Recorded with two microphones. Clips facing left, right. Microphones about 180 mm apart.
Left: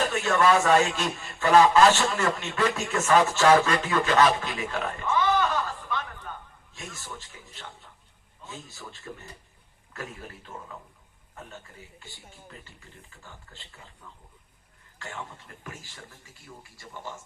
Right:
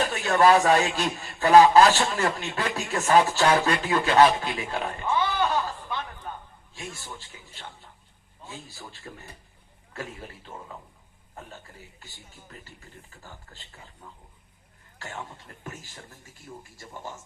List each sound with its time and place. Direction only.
0.2 s speech: 35° right (ahead or behind)
3.6 s a sound: 35° right (ahead or behind)
6.7 s a man's voice: 30° right (ahead or behind)